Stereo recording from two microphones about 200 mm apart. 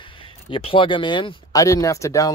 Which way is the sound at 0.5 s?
25° left (ahead or behind).